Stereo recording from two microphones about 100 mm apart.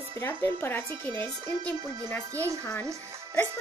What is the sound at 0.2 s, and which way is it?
A woman's voice, 20° left (ahead or behind).